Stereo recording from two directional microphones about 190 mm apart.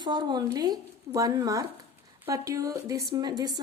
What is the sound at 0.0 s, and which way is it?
A woman's voice, 25° right (ahead or behind).